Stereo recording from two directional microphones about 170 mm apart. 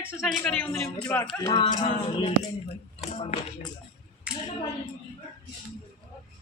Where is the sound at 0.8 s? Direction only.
15° left (ahead or behind).